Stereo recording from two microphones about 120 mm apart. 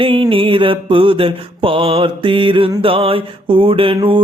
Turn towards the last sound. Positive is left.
turn(degrees=-50)  # may be behind; listen again after turning